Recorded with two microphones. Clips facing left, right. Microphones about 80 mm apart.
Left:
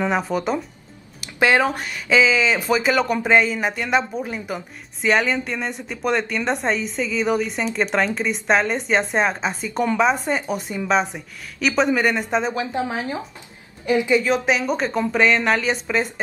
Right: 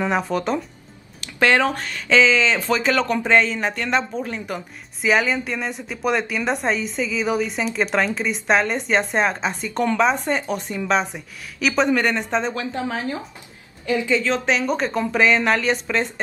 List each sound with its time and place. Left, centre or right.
0.0 s speech: centre
12.5 s speech: left; by 16.1 s centre